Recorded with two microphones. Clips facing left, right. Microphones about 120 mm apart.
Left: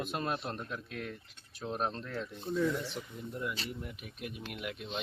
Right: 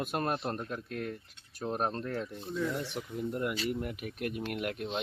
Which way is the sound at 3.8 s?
60° right (ahead or behind).